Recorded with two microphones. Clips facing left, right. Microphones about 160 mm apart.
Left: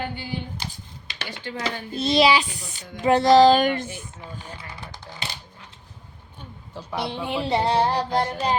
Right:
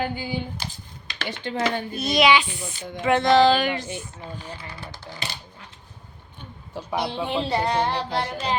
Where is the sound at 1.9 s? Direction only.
30° left (ahead or behind); by 3.8 s 45° left (ahead or behind).